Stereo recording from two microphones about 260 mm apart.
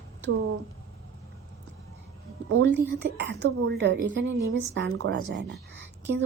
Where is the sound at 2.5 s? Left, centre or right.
Right.